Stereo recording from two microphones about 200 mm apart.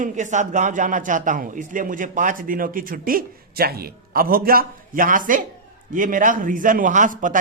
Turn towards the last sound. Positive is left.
turn(degrees=-40)  # may be behind; listen again after turning